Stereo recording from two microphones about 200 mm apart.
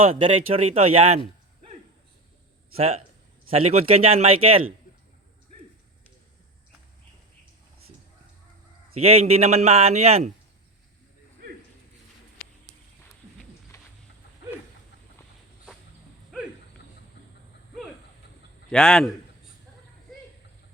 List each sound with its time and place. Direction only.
0.0 s a man's voice: 25° right (ahead or behind)
2.7 s a man's voice: 30° right (ahead or behind)
9.0 s a man's voice: 30° right (ahead or behind)
13.7 s a sound: 15° left (ahead or behind)
18.7 s a man's voice: 5° left (ahead or behind)